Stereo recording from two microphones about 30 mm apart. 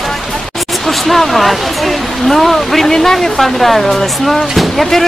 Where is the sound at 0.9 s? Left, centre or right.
Centre.